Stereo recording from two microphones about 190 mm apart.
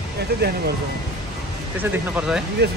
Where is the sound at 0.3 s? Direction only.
60° right (ahead or behind).